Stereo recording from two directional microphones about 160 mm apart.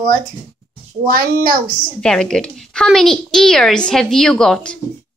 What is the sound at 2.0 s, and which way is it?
A woman's voice, 5° left (ahead or behind).